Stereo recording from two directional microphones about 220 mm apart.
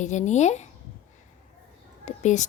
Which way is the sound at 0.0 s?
35° left (ahead or behind).